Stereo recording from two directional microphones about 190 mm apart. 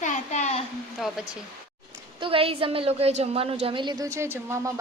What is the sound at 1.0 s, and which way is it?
Speech, 5° right (ahead or behind).